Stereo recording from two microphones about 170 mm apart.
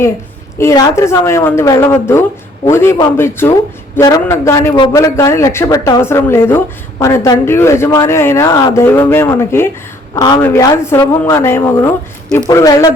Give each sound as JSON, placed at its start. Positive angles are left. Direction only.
{"t": 0.6, "sound": "speech", "side_deg": 20}